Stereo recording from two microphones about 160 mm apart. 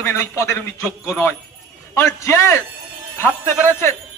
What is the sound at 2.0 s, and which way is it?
Speech, 15° left (ahead or behind).